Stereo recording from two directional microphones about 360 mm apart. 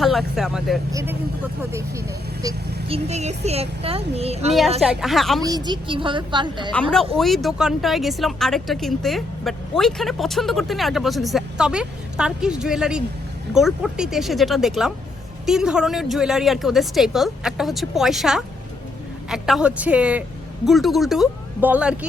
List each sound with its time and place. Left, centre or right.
0.0 s speech: centre
4.8 s speech: centre
5.4 s speech: centre
7.2 s speech: centre